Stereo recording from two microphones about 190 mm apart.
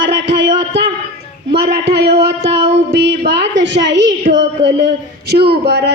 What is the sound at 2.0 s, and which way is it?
A man's voice, 60° right (ahead or behind).